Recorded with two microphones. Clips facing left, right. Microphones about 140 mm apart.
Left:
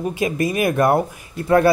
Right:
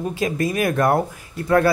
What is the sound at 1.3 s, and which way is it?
Speech, 20° left (ahead or behind).